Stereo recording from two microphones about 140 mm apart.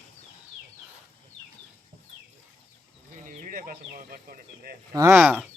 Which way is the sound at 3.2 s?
75° right (ahead or behind).